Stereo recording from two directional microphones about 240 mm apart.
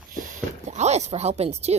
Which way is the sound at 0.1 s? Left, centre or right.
Right.